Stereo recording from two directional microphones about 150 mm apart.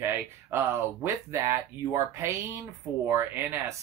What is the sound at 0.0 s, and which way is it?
Speech, 15° right (ahead or behind).